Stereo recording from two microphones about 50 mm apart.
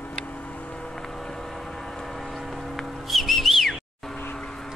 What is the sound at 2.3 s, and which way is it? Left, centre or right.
Whistle, centre.